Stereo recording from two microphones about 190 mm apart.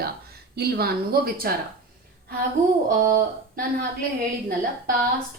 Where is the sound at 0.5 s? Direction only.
55° right (ahead or behind).